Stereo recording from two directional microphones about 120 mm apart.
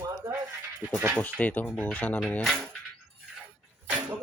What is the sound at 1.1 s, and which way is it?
Speech, 15° left (ahead or behind).